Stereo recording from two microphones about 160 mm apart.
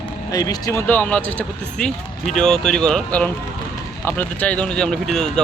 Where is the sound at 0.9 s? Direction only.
10° left (ahead or behind).